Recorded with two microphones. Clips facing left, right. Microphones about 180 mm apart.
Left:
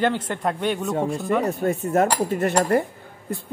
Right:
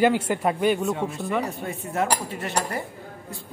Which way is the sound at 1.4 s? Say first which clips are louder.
Left 9 dB; 45° left (ahead or behind).